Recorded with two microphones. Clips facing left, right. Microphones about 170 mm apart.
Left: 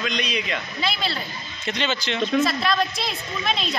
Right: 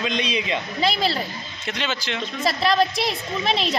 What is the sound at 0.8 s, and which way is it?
Speech, 40° right (ahead or behind).